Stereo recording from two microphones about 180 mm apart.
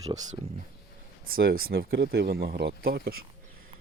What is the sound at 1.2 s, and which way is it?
Speech, 55° right (ahead or behind).